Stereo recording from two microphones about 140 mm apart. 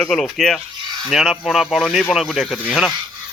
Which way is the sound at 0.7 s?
30° right (ahead or behind).